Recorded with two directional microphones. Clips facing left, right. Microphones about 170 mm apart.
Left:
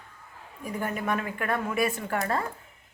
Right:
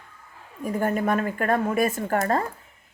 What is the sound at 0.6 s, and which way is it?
Speech, 45° right (ahead or behind).